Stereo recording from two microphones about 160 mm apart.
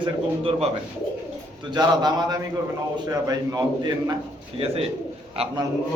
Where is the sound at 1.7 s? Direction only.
25° right (ahead or behind).